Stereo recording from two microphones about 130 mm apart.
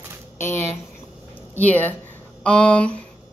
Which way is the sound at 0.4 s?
20° left (ahead or behind).